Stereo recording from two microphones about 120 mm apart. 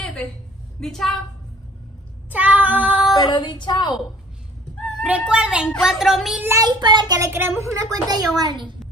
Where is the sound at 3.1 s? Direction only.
35° left (ahead or behind).